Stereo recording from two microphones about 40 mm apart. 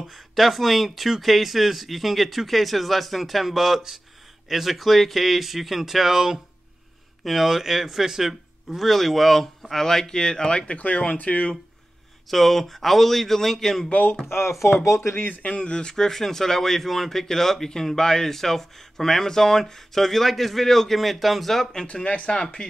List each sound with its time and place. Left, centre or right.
0.1 s speech: centre; by 10.8 s left
11.1 s speech: left
12.3 s speech: centre
14.6 s speech: left
15.0 s speech: left
15.4 s speech: left
15.9 s speech: centre
22.0 s speech: left